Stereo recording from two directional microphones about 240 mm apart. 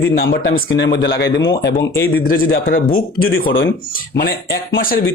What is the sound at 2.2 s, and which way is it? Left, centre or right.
Speech, left.